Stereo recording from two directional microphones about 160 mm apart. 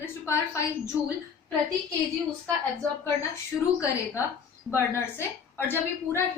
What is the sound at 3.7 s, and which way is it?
A woman's voice, 20° left (ahead or behind).